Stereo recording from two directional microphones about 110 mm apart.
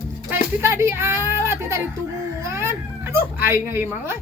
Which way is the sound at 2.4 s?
25° right (ahead or behind).